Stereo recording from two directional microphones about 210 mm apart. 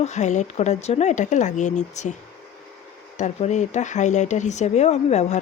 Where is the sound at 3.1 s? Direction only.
35° left (ahead or behind).